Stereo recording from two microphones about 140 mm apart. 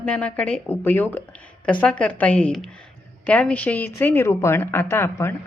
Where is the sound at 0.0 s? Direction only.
10° left (ahead or behind).